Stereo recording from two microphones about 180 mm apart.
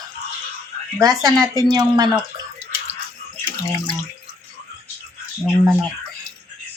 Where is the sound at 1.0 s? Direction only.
20° right (ahead or behind).